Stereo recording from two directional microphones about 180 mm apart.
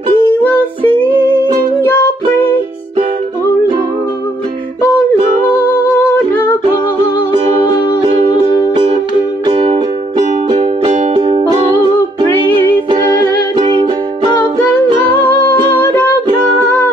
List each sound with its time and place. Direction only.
0.4 s music: 10° left (ahead or behind)
6.1 s humming: 10° left (ahead or behind)
8.5 s music: 25° right (ahead or behind)
13.6 s music: 25° right (ahead or behind)
15.8 s music: 10° left (ahead or behind)